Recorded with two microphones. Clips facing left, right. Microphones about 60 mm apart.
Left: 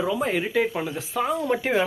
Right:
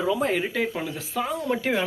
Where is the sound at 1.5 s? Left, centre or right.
Left.